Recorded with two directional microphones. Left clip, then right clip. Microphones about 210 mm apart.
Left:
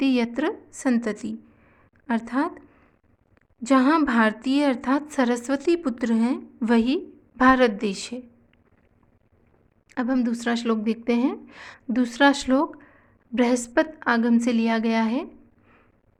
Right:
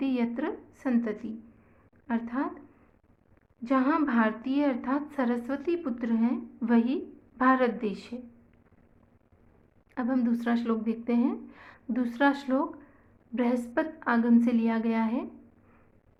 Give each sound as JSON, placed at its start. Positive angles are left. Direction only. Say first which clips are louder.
{"t": 0.0, "sound": "a woman's voice", "louder": "left 7 dB", "side_deg": 50}
{"t": 9.9, "sound": "a woman's voice", "louder": "left 4 dB", "side_deg": 45}